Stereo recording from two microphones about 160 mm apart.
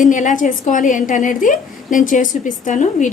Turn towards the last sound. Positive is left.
turn(degrees=50)  # may be behind; listen again after turning